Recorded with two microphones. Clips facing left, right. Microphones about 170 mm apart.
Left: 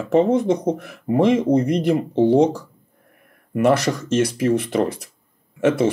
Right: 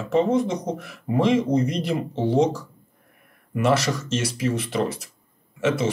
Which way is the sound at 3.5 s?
55° left (ahead or behind).